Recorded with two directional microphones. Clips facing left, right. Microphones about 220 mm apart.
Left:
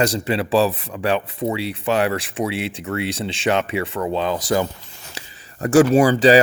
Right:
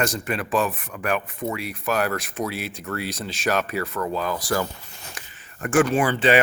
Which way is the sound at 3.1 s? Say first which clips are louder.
Left 3 dB; 30° left (ahead or behind).